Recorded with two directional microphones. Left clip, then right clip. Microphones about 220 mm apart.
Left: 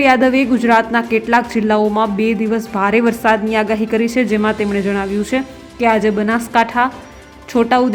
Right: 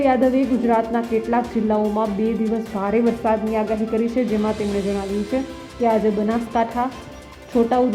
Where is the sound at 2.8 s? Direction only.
20° left (ahead or behind).